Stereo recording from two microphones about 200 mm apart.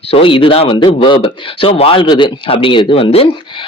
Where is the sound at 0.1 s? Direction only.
25° left (ahead or behind).